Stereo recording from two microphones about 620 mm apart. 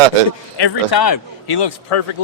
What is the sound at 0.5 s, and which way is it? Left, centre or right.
A man's voice, left.